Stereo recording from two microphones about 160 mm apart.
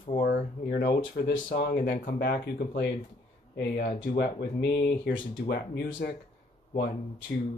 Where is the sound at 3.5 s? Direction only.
80° left.